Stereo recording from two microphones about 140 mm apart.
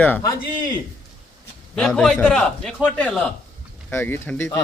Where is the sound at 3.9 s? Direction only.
15° left (ahead or behind).